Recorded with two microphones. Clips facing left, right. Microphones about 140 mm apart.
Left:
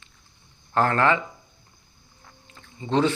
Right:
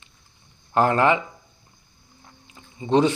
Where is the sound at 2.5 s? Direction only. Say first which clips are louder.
Right 4 dB; 15° right (ahead or behind).